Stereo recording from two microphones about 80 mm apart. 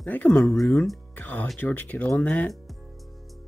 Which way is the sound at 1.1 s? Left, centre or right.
Left.